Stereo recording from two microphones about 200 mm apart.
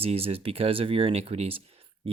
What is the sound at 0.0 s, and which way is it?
Speech, 30° right (ahead or behind).